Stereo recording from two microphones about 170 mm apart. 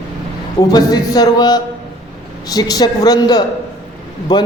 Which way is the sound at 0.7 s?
20° left (ahead or behind).